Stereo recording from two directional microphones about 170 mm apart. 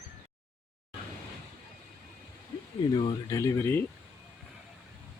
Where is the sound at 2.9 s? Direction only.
25° left (ahead or behind).